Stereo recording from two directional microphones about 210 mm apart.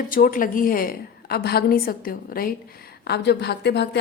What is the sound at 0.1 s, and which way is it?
A woman's voice, 40° left (ahead or behind).